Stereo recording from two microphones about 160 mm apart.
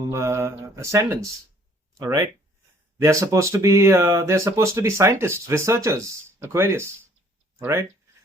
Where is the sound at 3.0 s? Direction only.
20° right (ahead or behind).